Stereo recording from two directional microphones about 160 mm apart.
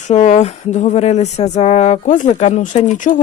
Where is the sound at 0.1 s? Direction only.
45° left (ahead or behind).